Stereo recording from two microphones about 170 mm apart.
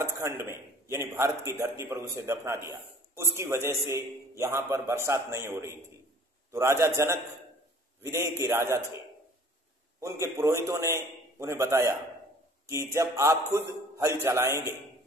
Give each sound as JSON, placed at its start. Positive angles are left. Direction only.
{"t": 0.0, "sound": "a man's voice", "side_deg": -15}
{"t": 8.0, "sound": "a man's voice", "side_deg": -15}
{"t": 9.9, "sound": "a man's voice", "side_deg": -15}